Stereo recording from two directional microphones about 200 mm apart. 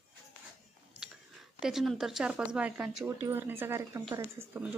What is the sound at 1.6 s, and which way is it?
Speech, centre (ahead or behind).